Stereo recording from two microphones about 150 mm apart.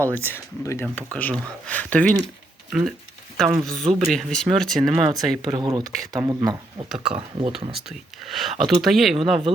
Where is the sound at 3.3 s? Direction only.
Centre (ahead or behind).